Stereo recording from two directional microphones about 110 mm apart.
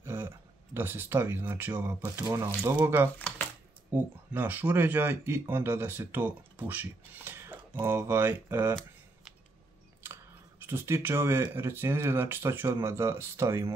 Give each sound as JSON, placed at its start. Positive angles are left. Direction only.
{"t": 0.0, "sound": "a sound", "side_deg": -20}
{"t": 0.7, "sound": "speech", "side_deg": -20}
{"t": 2.0, "sound": "speech", "side_deg": -30}
{"t": 3.2, "sound": "speech", "side_deg": 15}
{"t": 3.9, "sound": "speech", "side_deg": -15}
{"t": 10.6, "sound": "speech", "side_deg": -20}